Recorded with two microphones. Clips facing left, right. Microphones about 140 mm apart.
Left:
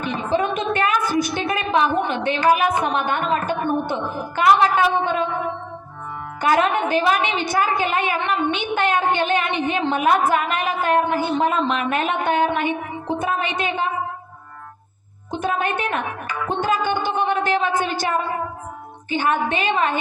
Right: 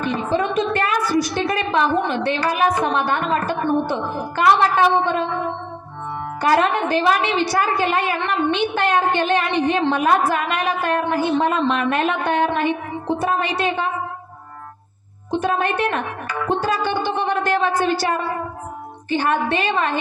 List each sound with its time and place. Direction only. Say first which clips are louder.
0.0 s a woman's voice: right 1 dB; 40° right (ahead or behind)
6.4 s a woman's voice: right 1 dB; 40° right (ahead or behind)
15.3 s a woman's voice: right 2 dB; 40° right (ahead or behind)